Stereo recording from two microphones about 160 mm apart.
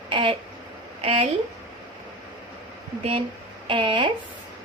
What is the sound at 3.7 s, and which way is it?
Speech, 30° right (ahead or behind).